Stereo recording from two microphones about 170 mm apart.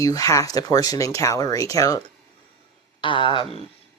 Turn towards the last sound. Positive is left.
turn(degrees=30)  # may be behind; listen again after turning